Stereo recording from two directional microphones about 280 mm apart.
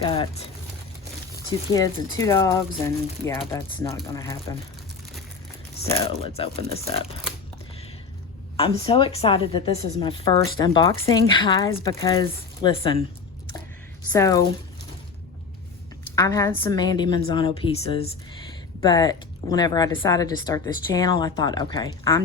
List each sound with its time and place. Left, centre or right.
0.0 s a woman's voice: centre
1.5 s a woman's voice: centre
5.9 s speech: centre
8.5 s a woman's voice: centre
14.1 s a woman's voice: centre
16.1 s a woman's voice: centre